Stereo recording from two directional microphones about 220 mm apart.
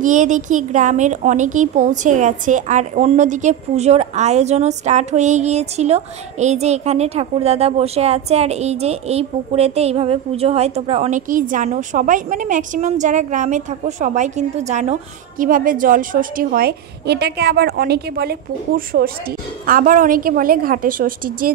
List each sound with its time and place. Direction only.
0.0 s a woman's voice: 35° right (ahead or behind)